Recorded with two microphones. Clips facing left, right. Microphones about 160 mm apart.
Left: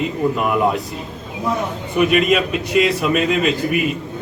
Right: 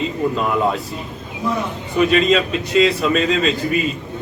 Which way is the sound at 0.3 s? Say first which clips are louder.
Left 1 dB; 15° left (ahead or behind).